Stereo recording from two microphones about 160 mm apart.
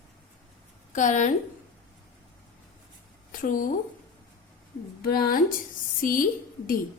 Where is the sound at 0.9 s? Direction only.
50° left (ahead or behind).